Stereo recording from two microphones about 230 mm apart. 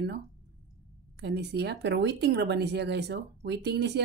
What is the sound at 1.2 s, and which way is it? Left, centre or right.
Speech, right.